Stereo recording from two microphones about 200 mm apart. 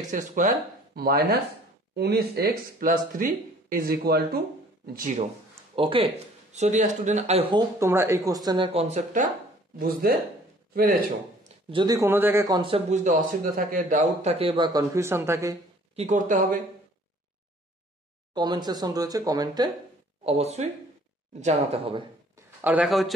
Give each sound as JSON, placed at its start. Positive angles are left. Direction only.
{"t": 0.1, "sound": "speech", "side_deg": -40}
{"t": 4.9, "sound": "speech", "side_deg": -40}
{"t": 5.8, "sound": "speech", "side_deg": -25}
{"t": 7.5, "sound": "speech", "side_deg": -15}
{"t": 8.5, "sound": "a man's voice", "side_deg": -25}
{"t": 11.7, "sound": "a man's voice", "side_deg": -20}
{"t": 16.0, "sound": "speech", "side_deg": -40}
{"t": 18.3, "sound": "a man's voice", "side_deg": -20}
{"t": 20.2, "sound": "a man's voice", "side_deg": -30}
{"t": 22.6, "sound": "speech", "side_deg": -5}